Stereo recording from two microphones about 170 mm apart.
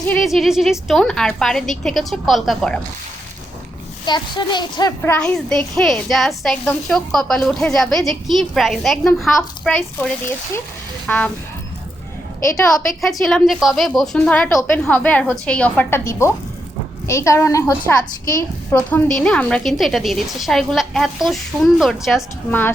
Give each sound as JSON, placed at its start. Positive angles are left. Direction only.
{"t": 0.1, "sound": "a woman's voice", "side_deg": 0}
{"t": 4.0, "sound": "a woman's voice", "side_deg": 25}
{"t": 5.1, "sound": "a woman's voice", "side_deg": 5}
{"t": 12.7, "sound": "a woman's voice", "side_deg": 0}